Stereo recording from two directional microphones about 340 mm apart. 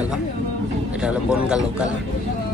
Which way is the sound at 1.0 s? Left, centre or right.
Centre.